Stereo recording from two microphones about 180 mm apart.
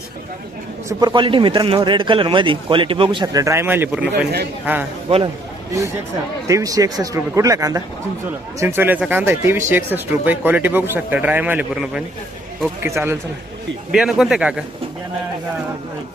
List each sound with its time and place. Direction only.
0.9 s a man's voice: 20° right (ahead or behind)
5.0 s a man's voice: 30° right (ahead or behind)
6.5 s a man's voice: 20° right (ahead or behind)
13.9 s a man's voice: centre (ahead or behind)